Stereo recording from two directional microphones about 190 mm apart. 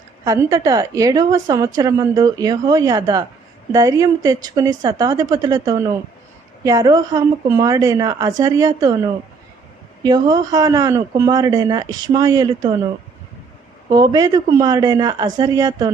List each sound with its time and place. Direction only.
0.3 s a woman's voice: 15° right (ahead or behind)
10.0 s speech: 20° right (ahead or behind)
13.9 s speech: 20° right (ahead or behind)